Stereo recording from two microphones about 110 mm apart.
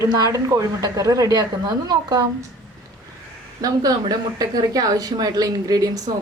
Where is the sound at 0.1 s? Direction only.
35° right (ahead or behind).